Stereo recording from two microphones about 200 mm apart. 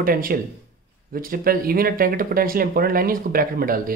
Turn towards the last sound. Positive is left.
turn(degrees=-45)  # may be behind; listen again after turning